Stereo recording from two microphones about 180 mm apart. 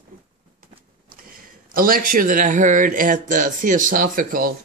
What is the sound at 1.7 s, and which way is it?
Speech, 55° right (ahead or behind).